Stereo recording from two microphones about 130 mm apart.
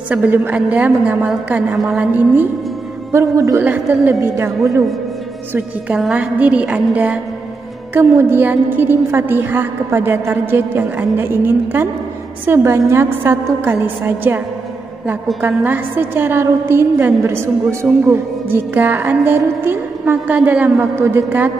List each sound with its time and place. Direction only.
0.1 s a woman's voice: 10° right (ahead or behind)
3.1 s speech: 20° right (ahead or behind)
3.6 s a woman's voice: 15° right (ahead or behind)
5.5 s a woman's voice: 10° right (ahead or behind)
15.4 s a woman's voice: 15° right (ahead or behind)